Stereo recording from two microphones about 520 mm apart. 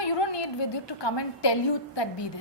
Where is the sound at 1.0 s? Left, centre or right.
Left.